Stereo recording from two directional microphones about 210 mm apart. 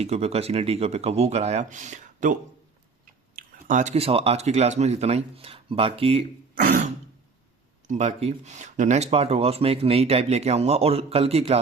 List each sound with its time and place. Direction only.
0.0 s speech: 30° right (ahead or behind)
6.6 s speech: 40° right (ahead or behind)